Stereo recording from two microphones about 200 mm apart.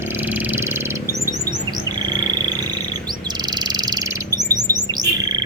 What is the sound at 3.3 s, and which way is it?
Bird, 20° right (ahead or behind).